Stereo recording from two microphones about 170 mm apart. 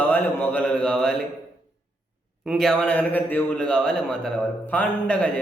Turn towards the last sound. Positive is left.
turn(degrees=5)  # may be behind; listen again after turning